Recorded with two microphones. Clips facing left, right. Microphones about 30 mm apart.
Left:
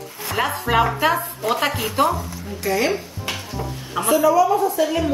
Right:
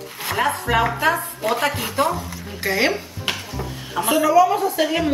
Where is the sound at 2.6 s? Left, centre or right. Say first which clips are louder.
Right 1 dB; right.